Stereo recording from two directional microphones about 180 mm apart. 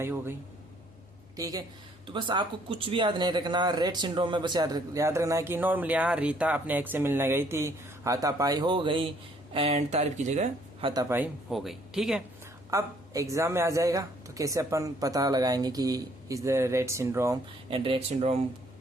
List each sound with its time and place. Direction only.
0.0 s speech: 15° right (ahead or behind)
1.4 s speech: 20° right (ahead or behind)
11.1 s speech: 5° right (ahead or behind)
12.7 s speech: 15° right (ahead or behind)
17.7 s speech: 30° right (ahead or behind)